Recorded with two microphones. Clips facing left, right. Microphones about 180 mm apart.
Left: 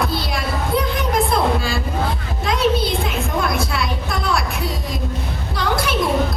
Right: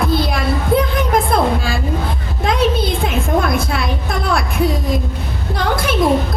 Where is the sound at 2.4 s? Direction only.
55° right (ahead or behind).